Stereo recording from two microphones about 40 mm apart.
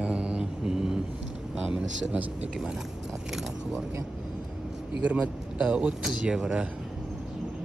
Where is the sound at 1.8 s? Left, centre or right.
Right.